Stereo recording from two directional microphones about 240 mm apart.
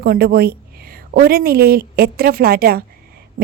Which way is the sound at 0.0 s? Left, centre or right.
Right.